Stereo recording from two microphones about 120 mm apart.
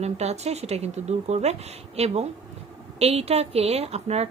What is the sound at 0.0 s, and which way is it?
A woman's voice, 65° right (ahead or behind).